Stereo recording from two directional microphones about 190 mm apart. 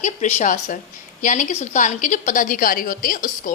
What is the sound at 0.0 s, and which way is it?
A woman's voice, 35° left (ahead or behind).